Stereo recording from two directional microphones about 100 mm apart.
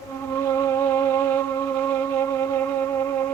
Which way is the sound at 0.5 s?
25° left (ahead or behind).